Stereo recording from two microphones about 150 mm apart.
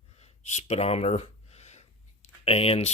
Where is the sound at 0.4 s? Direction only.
50° left (ahead or behind).